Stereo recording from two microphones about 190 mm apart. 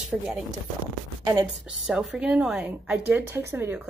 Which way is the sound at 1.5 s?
Centre (ahead or behind).